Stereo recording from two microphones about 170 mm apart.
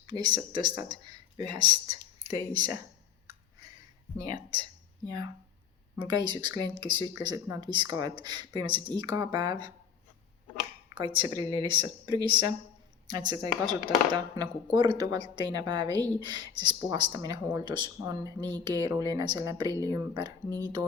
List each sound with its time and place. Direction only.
0.1 s speech: 25° right (ahead or behind)
4.2 s speech: 20° right (ahead or behind)
10.9 s speech: 25° right (ahead or behind)